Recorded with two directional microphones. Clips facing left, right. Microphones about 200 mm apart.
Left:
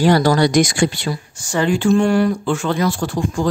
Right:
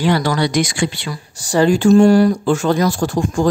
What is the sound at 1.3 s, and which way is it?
Speech, 35° right (ahead or behind).